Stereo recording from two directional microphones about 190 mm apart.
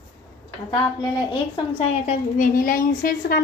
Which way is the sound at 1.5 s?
30° left (ahead or behind).